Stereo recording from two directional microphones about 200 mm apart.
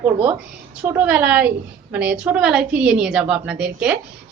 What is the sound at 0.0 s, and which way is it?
A woman's voice, 5° right (ahead or behind).